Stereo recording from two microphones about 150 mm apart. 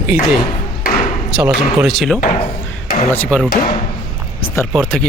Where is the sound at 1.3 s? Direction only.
10° right (ahead or behind); by 3.5 s 10° left (ahead or behind).